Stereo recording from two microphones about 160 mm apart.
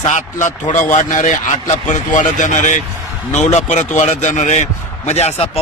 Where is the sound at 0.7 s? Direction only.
50° left (ahead or behind).